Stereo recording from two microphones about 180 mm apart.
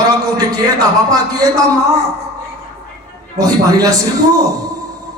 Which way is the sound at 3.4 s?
20° right (ahead or behind).